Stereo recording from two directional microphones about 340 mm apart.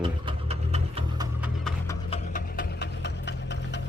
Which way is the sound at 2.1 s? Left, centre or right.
Left.